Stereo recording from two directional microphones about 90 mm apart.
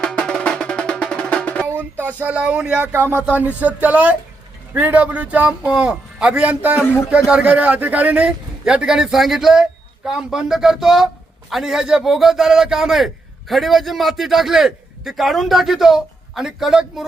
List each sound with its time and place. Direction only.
0.0 s music: 10° left (ahead or behind)
1.7 s speech: 20° right (ahead or behind)
2.7 s a man's voice: 20° right (ahead or behind); by 17.1 s 5° right (ahead or behind)